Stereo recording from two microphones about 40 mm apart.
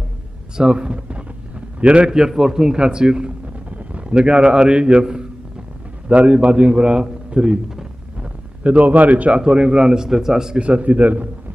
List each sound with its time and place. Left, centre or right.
0.6 s a man's voice: right
2.0 s a man's voice: centre
8.6 s a man's voice: right
9.4 s a man's voice: right
10.6 s a man's voice: right